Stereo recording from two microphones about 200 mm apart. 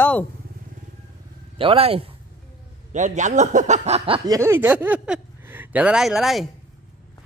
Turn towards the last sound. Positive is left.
turn(degrees=0)  # may be behind; listen again after turning